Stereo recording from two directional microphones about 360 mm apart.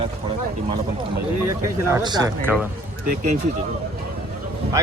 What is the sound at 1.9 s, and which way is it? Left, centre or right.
Speech, centre.